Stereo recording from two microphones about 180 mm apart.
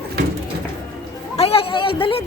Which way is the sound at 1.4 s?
30° left (ahead or behind).